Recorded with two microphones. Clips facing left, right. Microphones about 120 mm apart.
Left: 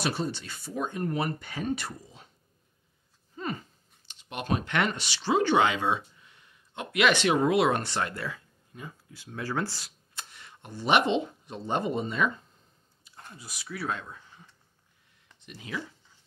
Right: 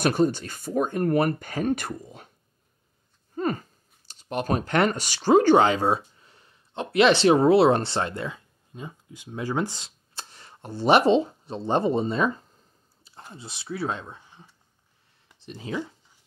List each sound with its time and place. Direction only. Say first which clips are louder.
0.0 s speech: right 9 dB; 50° right (ahead or behind)
3.3 s speech: right 8 dB; 45° right (ahead or behind); by 14.5 s 15° right (ahead or behind)
15.3 s speech: right 6 dB; 30° right (ahead or behind)